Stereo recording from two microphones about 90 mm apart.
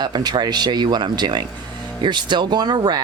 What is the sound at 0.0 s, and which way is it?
Speech, 50° right (ahead or behind).